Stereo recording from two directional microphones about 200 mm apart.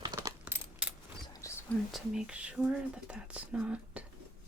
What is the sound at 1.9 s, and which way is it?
Speech, 5° right (ahead or behind).